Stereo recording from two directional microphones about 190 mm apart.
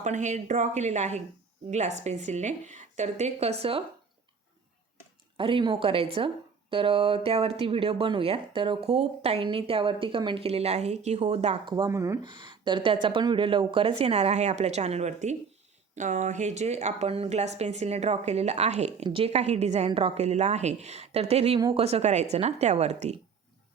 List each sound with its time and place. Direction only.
0.0 s speech: 40° right (ahead or behind)
5.4 s a woman's voice: 25° right (ahead or behind)